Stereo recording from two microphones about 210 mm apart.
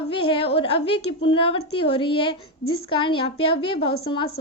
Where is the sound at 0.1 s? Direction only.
25° left (ahead or behind).